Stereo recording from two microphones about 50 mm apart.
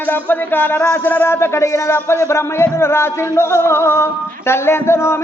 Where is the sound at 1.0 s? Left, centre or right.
Left.